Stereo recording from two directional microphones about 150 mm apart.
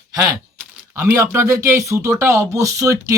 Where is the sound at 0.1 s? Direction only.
25° right (ahead or behind).